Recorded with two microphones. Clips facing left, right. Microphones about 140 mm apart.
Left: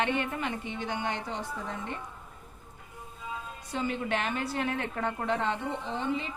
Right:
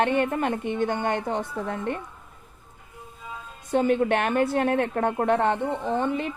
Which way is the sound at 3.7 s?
55° right (ahead or behind).